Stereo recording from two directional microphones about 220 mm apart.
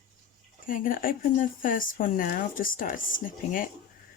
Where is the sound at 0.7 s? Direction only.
40° left (ahead or behind).